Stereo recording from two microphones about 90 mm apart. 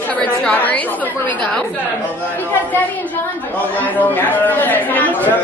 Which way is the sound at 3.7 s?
20° left (ahead or behind).